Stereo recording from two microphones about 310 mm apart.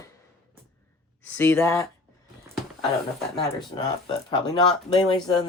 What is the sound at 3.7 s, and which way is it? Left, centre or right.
Speech, centre.